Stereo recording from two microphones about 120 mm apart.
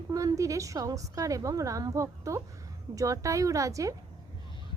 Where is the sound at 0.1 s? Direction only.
30° right (ahead or behind).